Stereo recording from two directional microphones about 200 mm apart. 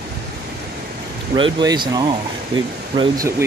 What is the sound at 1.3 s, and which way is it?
Speech, 20° right (ahead or behind).